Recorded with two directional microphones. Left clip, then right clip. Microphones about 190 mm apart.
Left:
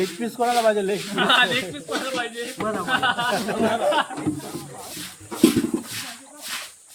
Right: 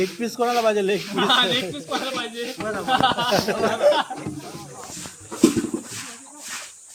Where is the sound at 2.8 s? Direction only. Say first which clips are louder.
Right 3 dB; 25° right (ahead or behind).